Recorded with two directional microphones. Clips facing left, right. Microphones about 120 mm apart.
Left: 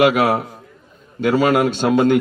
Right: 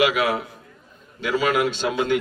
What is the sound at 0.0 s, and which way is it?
Speech, 50° left (ahead or behind).